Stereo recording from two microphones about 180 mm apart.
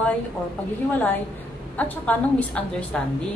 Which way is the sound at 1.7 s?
10° left (ahead or behind).